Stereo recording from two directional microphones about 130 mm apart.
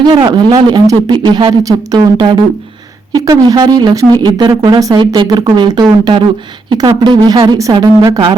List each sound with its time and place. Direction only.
0.0 s speech: 35° right (ahead or behind)